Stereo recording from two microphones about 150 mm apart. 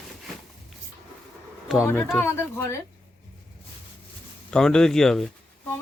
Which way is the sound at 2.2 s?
15° left (ahead or behind).